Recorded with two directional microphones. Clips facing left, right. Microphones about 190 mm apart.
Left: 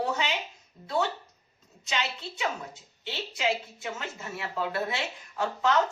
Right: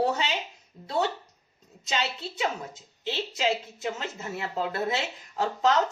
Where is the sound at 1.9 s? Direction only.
35° right (ahead or behind).